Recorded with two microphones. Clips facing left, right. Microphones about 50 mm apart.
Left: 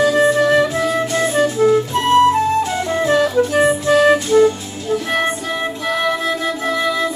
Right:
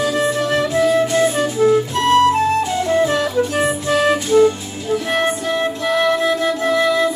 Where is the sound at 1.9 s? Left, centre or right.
Left.